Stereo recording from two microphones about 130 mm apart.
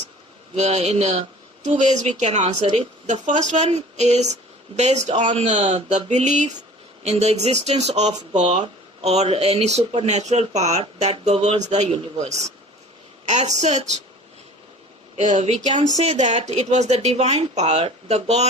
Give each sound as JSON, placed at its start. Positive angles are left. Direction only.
{"t": 0.5, "sound": "speech", "side_deg": -60}
{"t": 5.4, "sound": "a woman's voice", "side_deg": -65}
{"t": 15.1, "sound": "speech", "side_deg": -65}